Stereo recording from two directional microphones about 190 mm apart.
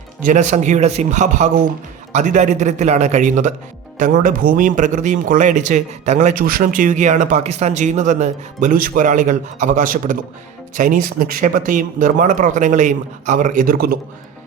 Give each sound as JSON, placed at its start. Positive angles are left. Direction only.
{"t": 0.2, "sound": "speech", "side_deg": -40}